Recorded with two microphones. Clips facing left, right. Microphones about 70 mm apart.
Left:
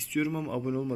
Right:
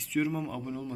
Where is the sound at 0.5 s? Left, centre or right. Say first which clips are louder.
Left 6 dB; centre.